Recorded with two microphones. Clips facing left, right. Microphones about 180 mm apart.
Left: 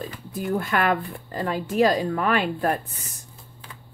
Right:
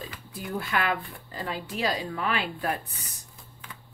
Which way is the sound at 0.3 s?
50° left (ahead or behind).